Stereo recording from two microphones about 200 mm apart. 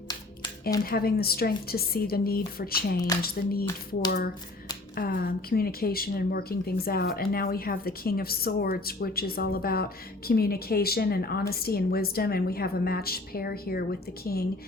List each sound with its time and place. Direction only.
0.9 s speech: 50° left (ahead or behind)
4.9 s speech: 50° left (ahead or behind)